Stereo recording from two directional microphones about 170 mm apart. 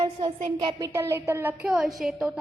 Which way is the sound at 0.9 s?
15° right (ahead or behind).